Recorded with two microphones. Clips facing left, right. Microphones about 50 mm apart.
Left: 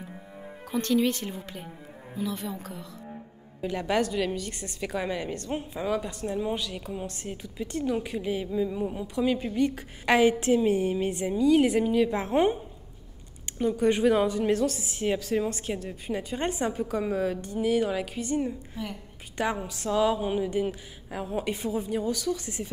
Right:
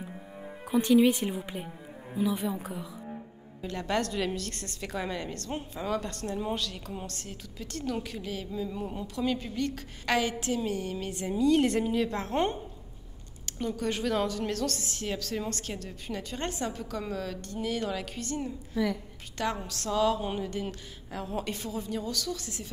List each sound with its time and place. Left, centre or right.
0.0 s music: centre
0.7 s a woman's voice: centre
3.6 s a woman's voice: centre
11.2 s a woman's voice: centre
13.6 s a woman's voice: centre